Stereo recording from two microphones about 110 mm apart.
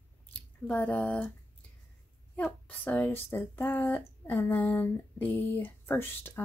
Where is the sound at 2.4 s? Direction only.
15° left (ahead or behind).